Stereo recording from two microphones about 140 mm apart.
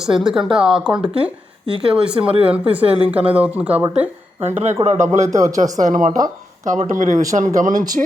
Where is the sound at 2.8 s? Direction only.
45° right (ahead or behind).